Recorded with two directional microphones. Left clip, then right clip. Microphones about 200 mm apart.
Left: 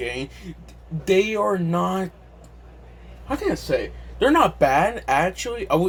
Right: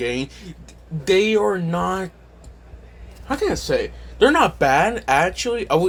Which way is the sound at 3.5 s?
40° right (ahead or behind).